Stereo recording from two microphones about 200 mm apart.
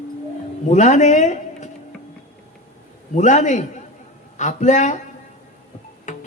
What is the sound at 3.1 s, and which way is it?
A man's voice, 35° left (ahead or behind).